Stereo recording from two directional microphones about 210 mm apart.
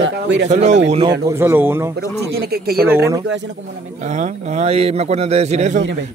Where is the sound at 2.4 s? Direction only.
45° right (ahead or behind).